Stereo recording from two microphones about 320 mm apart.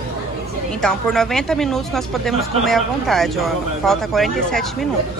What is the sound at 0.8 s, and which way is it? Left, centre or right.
Speech, centre.